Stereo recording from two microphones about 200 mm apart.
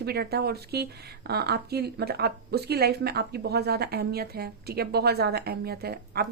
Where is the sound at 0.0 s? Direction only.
55° right (ahead or behind).